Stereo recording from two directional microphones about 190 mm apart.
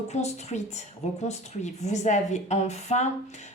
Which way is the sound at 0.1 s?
35° left (ahead or behind).